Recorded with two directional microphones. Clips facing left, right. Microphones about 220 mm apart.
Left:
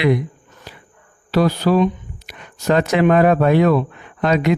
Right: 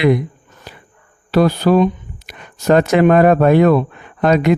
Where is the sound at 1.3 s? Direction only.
50° right (ahead or behind).